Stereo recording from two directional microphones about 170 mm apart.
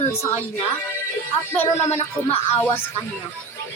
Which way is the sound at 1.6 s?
40° left (ahead or behind).